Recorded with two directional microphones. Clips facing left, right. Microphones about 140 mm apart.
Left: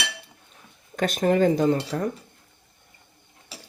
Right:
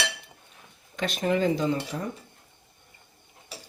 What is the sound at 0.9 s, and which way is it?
Speech, 45° left (ahead or behind).